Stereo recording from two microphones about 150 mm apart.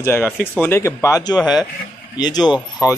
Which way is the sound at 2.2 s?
25° left (ahead or behind).